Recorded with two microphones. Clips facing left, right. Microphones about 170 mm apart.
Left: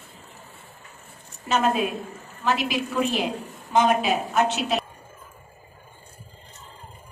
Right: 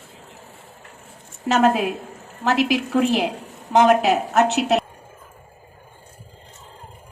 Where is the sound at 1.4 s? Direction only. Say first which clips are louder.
Right 5 dB; 75° right (ahead or behind).